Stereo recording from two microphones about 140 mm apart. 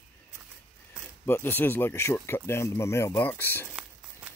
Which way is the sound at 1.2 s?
15° left (ahead or behind).